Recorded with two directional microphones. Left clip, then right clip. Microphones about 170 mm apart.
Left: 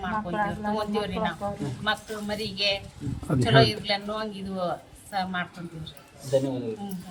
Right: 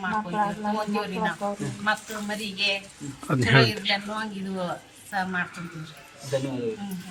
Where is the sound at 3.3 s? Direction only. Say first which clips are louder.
Even; 10° left (ahead or behind).